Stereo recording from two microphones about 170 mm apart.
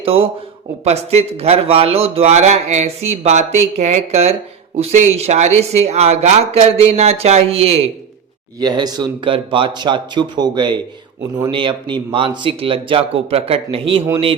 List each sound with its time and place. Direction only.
0.0 s a man's voice: 35° right (ahead or behind)
8.5 s a man's voice: 25° right (ahead or behind)